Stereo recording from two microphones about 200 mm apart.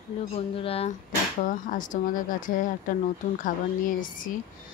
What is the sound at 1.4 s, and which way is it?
A woman's voice, 40° left (ahead or behind).